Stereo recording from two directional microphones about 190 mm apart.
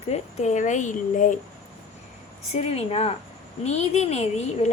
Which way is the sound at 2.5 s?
35° left (ahead or behind).